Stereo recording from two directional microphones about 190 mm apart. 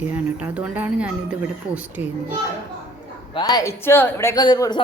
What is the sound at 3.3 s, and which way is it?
A man's voice, 20° left (ahead or behind).